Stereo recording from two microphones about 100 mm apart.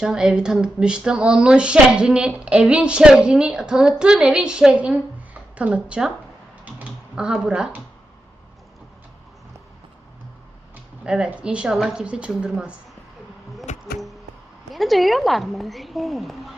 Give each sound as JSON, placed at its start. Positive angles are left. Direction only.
{"t": 0.0, "sound": "speech", "side_deg": -5}
{"t": 6.7, "sound": "typing", "side_deg": -10}
{"t": 11.0, "sound": "speech", "side_deg": -10}
{"t": 14.7, "sound": "a woman's voice", "side_deg": 0}